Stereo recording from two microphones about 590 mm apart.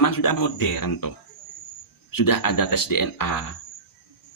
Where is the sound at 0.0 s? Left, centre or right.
Left.